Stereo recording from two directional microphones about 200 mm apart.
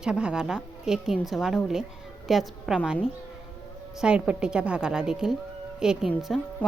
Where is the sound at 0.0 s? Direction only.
5° right (ahead or behind).